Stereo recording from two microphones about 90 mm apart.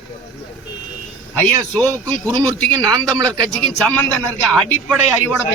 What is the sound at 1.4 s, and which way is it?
Speech, 15° left (ahead or behind).